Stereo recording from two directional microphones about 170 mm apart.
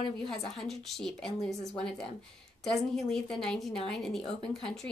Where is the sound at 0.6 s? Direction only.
Centre (ahead or behind).